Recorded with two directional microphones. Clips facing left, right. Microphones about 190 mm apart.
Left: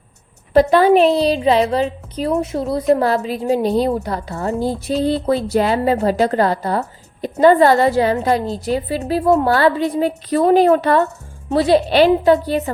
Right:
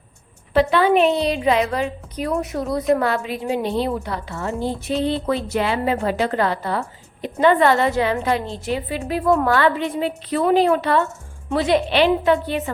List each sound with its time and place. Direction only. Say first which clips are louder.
0.5 s a woman's voice: left 5 dB; 40° left (ahead or behind)